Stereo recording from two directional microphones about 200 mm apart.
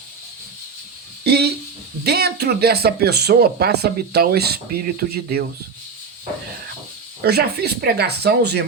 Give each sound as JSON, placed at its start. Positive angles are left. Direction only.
{"t": 1.2, "sound": "a sound", "side_deg": -55}
{"t": 2.0, "sound": "speech", "side_deg": -55}
{"t": 7.2, "sound": "speech", "side_deg": -55}